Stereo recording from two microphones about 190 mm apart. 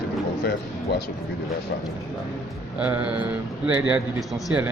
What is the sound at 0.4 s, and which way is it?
Speech, 60° left (ahead or behind).